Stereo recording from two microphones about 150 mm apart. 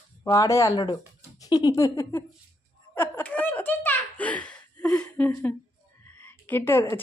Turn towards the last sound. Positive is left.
turn(degrees=15)  # may be behind; listen again after turning